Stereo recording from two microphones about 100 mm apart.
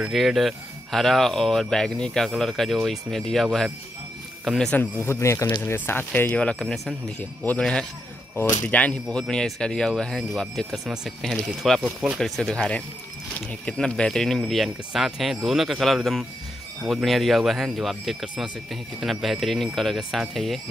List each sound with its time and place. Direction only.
0.0 s speech: centre (ahead or behind)
5.0 s speech: 25° left (ahead or behind)
6.6 s speech: 5° left (ahead or behind)